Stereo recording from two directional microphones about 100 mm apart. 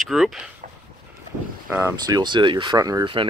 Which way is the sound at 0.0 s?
5° right (ahead or behind).